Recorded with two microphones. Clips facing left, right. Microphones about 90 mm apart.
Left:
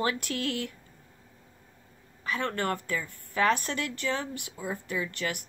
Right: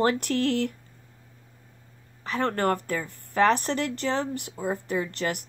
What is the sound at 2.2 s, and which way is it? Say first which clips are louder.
Speech: right 5 dB; 40° right (ahead or behind).